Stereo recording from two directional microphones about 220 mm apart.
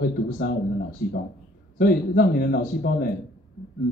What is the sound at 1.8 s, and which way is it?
Speech, 40° left (ahead or behind).